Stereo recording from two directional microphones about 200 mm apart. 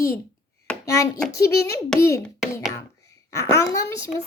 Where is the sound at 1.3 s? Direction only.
15° left (ahead or behind).